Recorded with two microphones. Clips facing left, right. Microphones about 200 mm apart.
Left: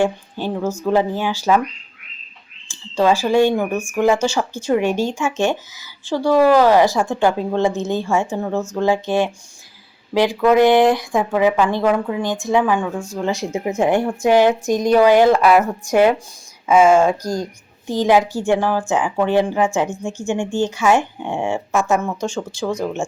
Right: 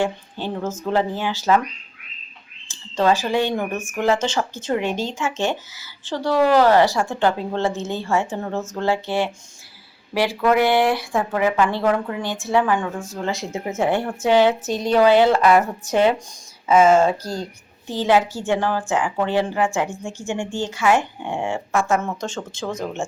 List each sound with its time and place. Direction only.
0.0 s a woman's voice: 15° left (ahead or behind)
2.9 s a woman's voice: 10° left (ahead or behind)
22.5 s speech: 25° right (ahead or behind)